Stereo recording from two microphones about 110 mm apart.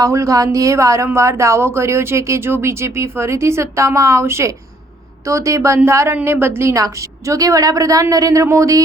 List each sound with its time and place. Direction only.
0.0 s speech: 30° right (ahead or behind)